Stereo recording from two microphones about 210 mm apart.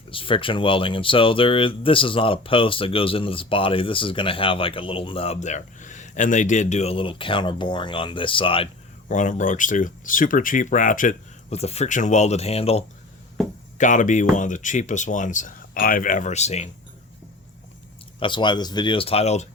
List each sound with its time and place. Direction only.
0.1 s speech: 25° left (ahead or behind)
18.2 s speech: 20° left (ahead or behind)